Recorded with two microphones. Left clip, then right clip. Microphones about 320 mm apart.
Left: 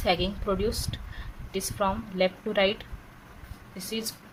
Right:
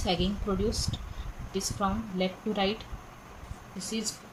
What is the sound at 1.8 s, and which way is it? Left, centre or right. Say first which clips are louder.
Speech: left 6 dB; left.